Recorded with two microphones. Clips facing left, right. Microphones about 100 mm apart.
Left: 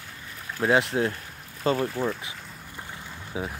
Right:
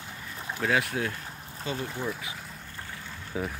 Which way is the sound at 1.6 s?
45° left (ahead or behind).